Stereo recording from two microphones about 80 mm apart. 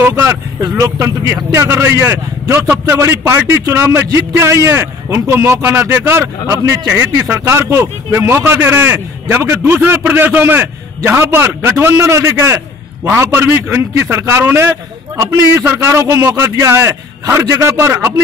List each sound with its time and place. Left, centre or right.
0.1 s a man's voice: right
6.5 s speech: right
6.9 s a man's voice: right